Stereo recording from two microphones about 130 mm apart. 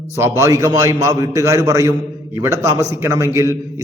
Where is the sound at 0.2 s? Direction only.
20° right (ahead or behind).